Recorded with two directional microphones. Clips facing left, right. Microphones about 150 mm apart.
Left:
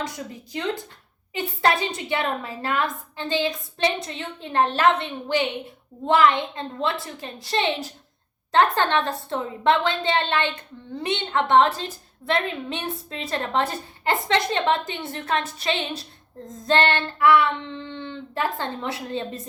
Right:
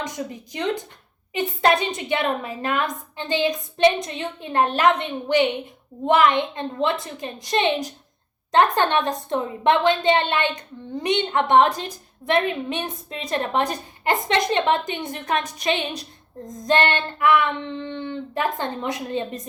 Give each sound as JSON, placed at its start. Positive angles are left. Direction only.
{"t": 0.0, "sound": "a woman's voice", "side_deg": -20}